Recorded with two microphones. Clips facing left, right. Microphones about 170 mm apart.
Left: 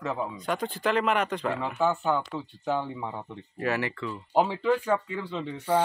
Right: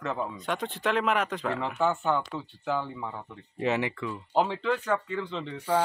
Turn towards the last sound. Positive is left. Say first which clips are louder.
# even
turn(degrees=10)  # may be behind; listen again after turning